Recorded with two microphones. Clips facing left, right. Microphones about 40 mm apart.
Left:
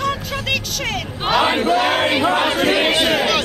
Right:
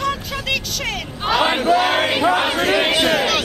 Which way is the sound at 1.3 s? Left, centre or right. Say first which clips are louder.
Left 1 dB; centre.